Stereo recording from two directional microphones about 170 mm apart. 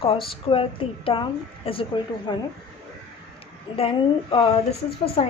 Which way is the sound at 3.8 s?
30° left (ahead or behind).